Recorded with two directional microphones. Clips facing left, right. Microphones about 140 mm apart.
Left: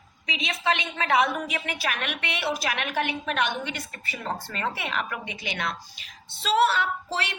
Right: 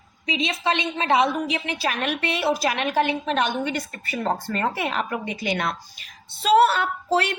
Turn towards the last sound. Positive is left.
turn(degrees=-45)  # may be behind; listen again after turning